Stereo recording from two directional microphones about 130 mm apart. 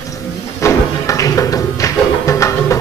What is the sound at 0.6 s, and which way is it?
Music, 25° left (ahead or behind).